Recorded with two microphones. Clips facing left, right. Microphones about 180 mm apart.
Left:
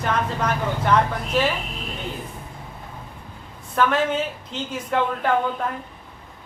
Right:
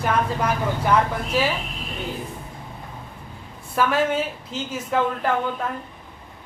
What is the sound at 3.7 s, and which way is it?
A woman's voice, 5° right (ahead or behind).